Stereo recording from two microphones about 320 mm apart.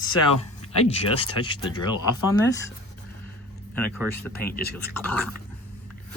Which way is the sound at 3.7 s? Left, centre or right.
Centre.